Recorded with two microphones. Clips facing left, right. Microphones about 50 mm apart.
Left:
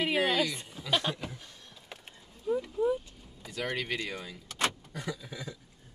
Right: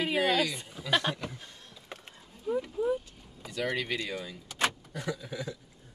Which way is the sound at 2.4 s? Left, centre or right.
Centre.